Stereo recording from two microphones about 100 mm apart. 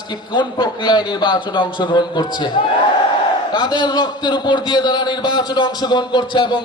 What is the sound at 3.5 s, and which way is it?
A man's voice, 50° left (ahead or behind).